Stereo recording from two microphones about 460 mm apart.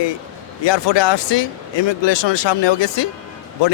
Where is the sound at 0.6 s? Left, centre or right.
Left.